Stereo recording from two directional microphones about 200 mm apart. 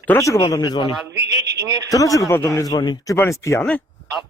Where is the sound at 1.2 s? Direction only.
60° right (ahead or behind).